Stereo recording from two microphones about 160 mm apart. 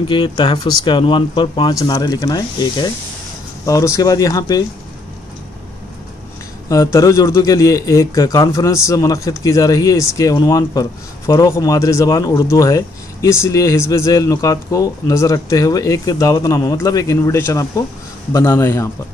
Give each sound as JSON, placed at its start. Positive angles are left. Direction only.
{"t": 0.1, "sound": "a man's voice", "side_deg": 30}
{"t": 6.7, "sound": "a man's voice", "side_deg": 20}